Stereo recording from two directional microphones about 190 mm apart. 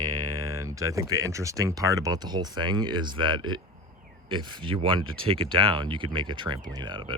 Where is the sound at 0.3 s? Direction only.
20° right (ahead or behind).